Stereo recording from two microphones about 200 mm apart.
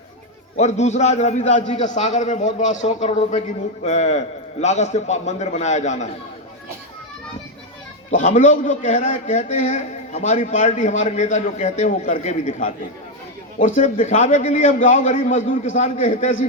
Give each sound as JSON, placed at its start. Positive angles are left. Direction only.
{"t": 0.5, "sound": "a man's voice", "side_deg": 35}
{"t": 8.1, "sound": "a man's voice", "side_deg": 40}